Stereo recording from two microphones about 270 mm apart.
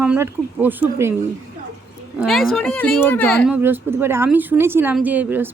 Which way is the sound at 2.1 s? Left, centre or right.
Centre.